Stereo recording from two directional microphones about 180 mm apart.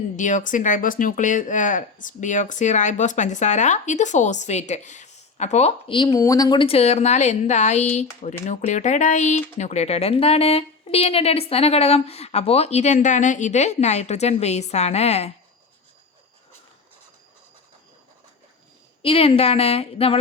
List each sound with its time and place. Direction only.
0.2 s speech: 45° left (ahead or behind)
19.0 s speech: 30° left (ahead or behind)